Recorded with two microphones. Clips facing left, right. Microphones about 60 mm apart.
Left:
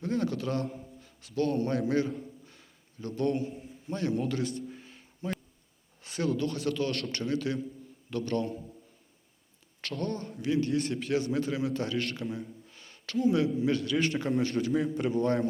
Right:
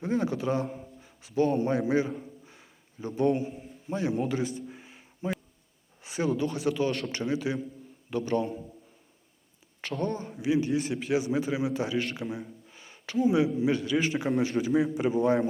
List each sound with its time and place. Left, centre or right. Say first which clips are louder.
0.0 s a man's voice: right 2 dB; centre
3.8 s a sound: right 2 dB; centre
6.0 s a man's voice: right 2 dB; centre
9.8 s a man's voice: right 3 dB; centre
12.3 s a sound: right 1 dB; centre
13.7 s a man's voice: right 1 dB; centre